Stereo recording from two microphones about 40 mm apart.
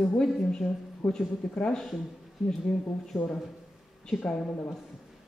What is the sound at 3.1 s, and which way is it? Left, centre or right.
Speech, centre.